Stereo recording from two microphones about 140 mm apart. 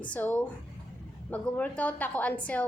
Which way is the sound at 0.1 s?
10° left (ahead or behind).